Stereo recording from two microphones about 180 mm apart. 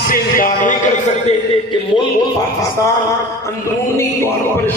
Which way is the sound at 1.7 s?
25° left (ahead or behind).